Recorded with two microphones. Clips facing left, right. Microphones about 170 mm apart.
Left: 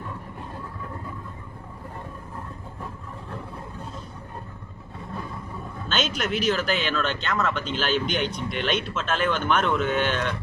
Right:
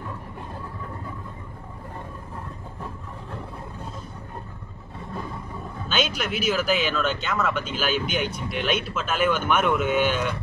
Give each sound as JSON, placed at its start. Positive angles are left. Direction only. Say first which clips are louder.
{"t": 5.9, "sound": "speech", "louder": "even", "side_deg": -10}